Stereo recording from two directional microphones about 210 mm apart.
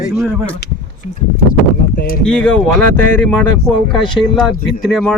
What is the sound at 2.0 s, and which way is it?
Speech, 45° left (ahead or behind).